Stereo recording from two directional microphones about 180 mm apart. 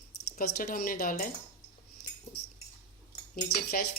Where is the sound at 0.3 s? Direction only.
50° left (ahead or behind).